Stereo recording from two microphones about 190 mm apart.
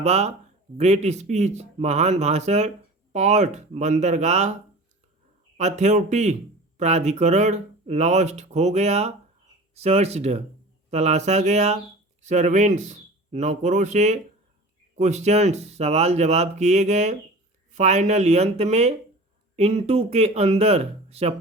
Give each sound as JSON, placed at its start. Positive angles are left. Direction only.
{"t": 0.0, "sound": "speech", "side_deg": -35}
{"t": 5.5, "sound": "speech", "side_deg": -40}